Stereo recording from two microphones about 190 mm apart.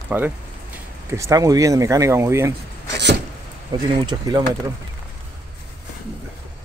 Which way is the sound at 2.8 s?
65° right (ahead or behind).